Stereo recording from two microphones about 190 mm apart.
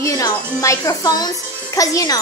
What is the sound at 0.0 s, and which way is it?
A child's voice, 15° left (ahead or behind).